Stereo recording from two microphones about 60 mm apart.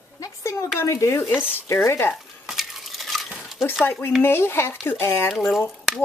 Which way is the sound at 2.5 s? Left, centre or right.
Centre.